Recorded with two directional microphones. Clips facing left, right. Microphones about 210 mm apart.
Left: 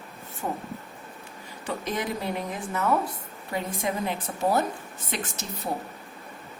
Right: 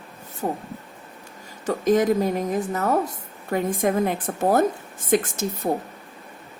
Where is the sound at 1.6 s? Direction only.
45° right (ahead or behind).